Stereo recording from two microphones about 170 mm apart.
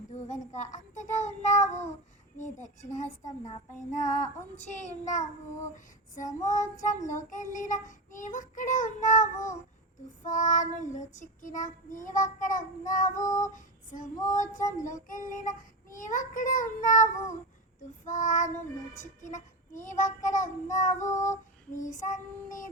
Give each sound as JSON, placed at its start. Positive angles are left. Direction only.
{"t": 0.1, "sound": "child singing", "side_deg": 45}
{"t": 4.6, "sound": "child singing", "side_deg": 45}
{"t": 13.5, "sound": "female singing", "side_deg": 50}
{"t": 14.3, "sound": "child singing", "side_deg": 45}
{"t": 14.6, "sound": "child singing", "side_deg": 20}
{"t": 14.8, "sound": "child singing", "side_deg": 50}